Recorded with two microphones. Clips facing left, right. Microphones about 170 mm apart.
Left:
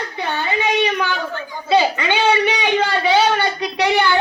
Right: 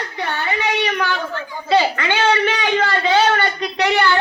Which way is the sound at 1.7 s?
15° left (ahead or behind).